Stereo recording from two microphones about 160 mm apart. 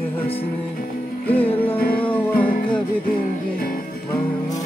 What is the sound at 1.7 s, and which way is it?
Music, 70° left (ahead or behind).